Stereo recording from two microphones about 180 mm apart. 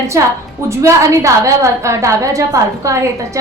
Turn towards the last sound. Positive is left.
turn(degrees=-15)  # may be behind; listen again after turning